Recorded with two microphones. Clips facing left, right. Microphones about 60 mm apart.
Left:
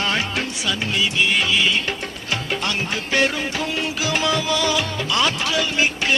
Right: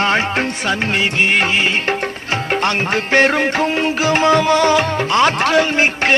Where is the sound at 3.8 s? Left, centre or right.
Right.